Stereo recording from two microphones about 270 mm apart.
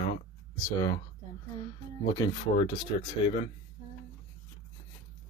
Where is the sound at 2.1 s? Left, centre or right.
Centre.